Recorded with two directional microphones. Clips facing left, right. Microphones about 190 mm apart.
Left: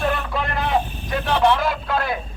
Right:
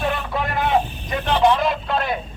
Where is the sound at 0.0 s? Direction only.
Centre (ahead or behind).